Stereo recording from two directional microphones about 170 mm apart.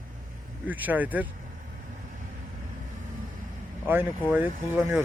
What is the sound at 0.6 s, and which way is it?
Speech, 10° right (ahead or behind).